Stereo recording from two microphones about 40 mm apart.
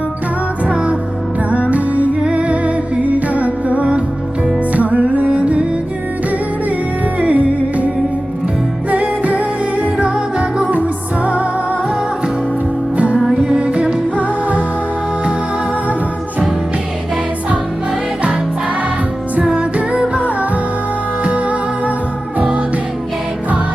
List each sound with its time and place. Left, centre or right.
0.7 s music: right
1.7 s music: right
7.2 s music: right
8.9 s music: right
13.4 s music: centre
13.7 s music: right
19.4 s music: right